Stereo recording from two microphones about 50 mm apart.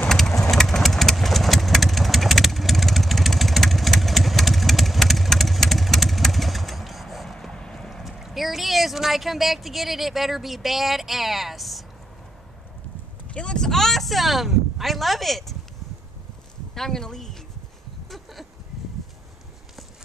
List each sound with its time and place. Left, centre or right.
0.4 s engine: centre
7.5 s clip-clop: centre
8.0 s speech: centre
13.3 s speech: centre
13.7 s speech: centre
16.7 s speech: centre
18.1 s a sound: centre